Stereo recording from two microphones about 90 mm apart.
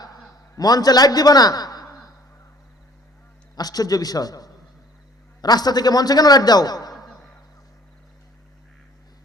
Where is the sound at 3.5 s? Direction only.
45° left (ahead or behind).